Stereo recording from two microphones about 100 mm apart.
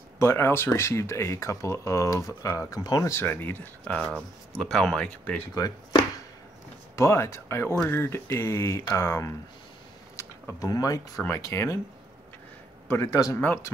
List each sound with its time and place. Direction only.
0.2 s speech: 25° left (ahead or behind)
3.1 s speech: 20° left (ahead or behind)
7.0 s speech: 25° left (ahead or behind)
10.6 s speech: 35° left (ahead or behind)
12.8 s speech: 30° left (ahead or behind)